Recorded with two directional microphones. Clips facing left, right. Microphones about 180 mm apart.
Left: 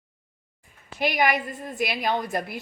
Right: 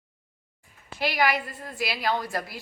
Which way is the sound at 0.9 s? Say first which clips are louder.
Left 2 dB; 20° left (ahead or behind).